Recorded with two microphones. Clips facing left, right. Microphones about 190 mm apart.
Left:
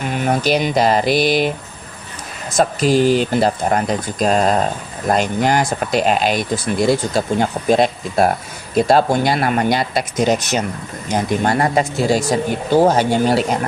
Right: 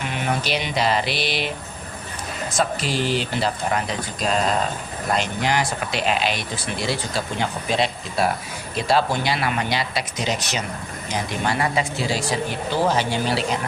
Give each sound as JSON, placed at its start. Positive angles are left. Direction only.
{"t": 0.0, "sound": "speech", "side_deg": 45}
{"t": 2.6, "sound": "speech", "side_deg": 45}